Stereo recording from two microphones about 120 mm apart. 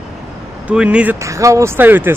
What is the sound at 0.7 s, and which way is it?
Speech, 10° right (ahead or behind).